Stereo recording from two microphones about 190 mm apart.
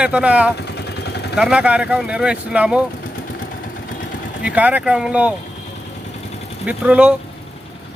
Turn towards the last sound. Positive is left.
turn(degrees=-5)  # may be behind; listen again after turning